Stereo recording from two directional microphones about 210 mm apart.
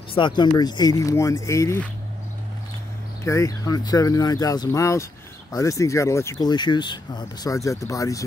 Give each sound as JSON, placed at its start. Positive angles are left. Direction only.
{"t": 0.1, "sound": "speech", "side_deg": 20}
{"t": 3.3, "sound": "speech", "side_deg": 15}